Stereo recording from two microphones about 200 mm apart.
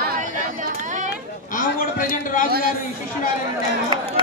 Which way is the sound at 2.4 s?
50° right (ahead or behind).